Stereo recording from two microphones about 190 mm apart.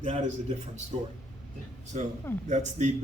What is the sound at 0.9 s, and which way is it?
Speech, 30° right (ahead or behind).